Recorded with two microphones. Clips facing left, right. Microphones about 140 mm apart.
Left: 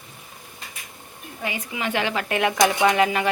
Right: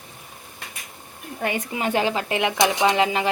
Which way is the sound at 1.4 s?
50° right (ahead or behind).